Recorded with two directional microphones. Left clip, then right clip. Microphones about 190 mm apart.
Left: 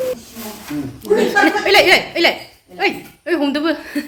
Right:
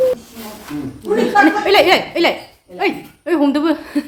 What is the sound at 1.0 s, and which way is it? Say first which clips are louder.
Speech: right 1 dB; 15° right (ahead or behind).